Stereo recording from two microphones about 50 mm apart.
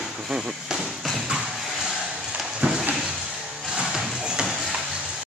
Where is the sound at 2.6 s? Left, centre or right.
Right.